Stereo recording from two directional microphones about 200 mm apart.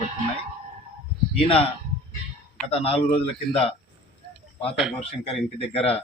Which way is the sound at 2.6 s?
30° left (ahead or behind).